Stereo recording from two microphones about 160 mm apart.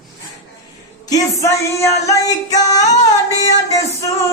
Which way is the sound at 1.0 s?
20° left (ahead or behind).